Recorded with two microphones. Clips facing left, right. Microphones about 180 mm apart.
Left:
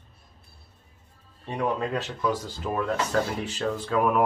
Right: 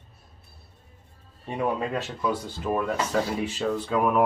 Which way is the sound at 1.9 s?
5° right (ahead or behind).